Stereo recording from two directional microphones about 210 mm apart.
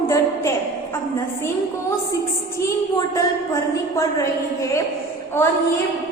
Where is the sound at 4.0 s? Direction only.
15° left (ahead or behind).